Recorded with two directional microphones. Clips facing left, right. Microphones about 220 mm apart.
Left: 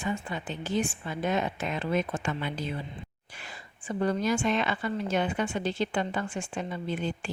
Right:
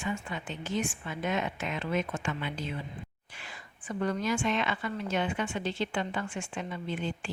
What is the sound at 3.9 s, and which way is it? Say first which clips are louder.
A woman's voice: left 3 dB; 30° left (ahead or behind).